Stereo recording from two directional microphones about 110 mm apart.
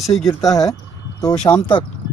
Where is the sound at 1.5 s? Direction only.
45° left (ahead or behind).